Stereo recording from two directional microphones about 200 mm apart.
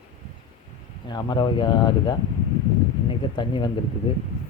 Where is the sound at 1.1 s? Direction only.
20° left (ahead or behind).